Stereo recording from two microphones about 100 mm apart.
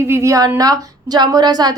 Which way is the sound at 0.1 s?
30° right (ahead or behind).